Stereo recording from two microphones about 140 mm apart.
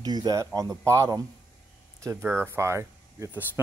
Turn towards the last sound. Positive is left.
turn(degrees=-15)  # may be behind; listen again after turning